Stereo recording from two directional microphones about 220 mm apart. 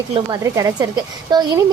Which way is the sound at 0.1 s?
15° right (ahead or behind).